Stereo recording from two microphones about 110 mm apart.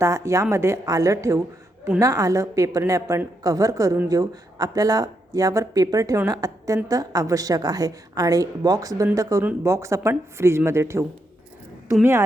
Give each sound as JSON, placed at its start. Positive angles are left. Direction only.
{"t": 0.0, "sound": "a woman's voice", "side_deg": -25}